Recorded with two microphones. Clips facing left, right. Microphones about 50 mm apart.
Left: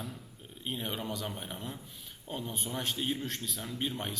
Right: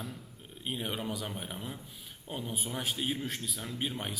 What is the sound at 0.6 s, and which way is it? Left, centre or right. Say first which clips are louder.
A man's voice: right 1 dB; centre.